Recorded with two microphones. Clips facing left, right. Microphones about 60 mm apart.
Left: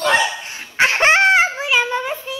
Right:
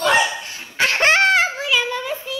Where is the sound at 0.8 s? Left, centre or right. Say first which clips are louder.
Left 2 dB; left.